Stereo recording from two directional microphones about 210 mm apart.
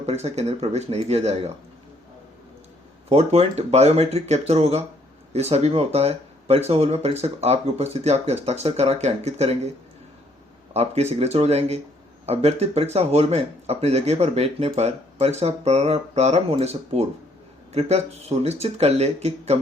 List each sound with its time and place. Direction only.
0.0 s speech: 30° right (ahead or behind)
3.1 s speech: 30° right (ahead or behind)
10.8 s speech: 30° right (ahead or behind)